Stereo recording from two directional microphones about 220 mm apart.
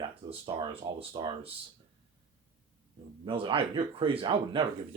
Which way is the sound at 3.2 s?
25° right (ahead or behind).